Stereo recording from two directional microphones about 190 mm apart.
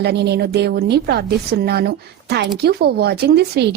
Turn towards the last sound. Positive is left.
turn(degrees=-60)  # may be behind; listen again after turning